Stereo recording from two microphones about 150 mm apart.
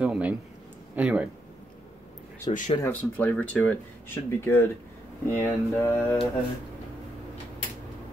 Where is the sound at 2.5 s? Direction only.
40° left (ahead or behind).